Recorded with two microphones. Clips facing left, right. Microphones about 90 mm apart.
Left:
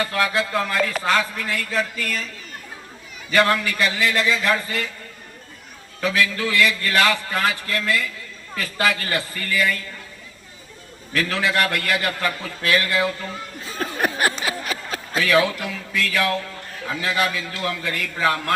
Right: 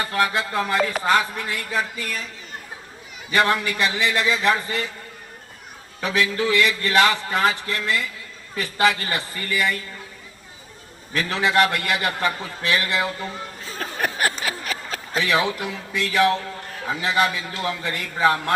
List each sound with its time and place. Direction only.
0.0 s a man's voice: 25° right (ahead or behind)
3.2 s a man's voice: 20° right (ahead or behind)
6.1 s a man's voice: 20° right (ahead or behind)
11.1 s a man's voice: 20° right (ahead or behind)
13.7 s a sound: 25° left (ahead or behind)
15.2 s a man's voice: 20° right (ahead or behind)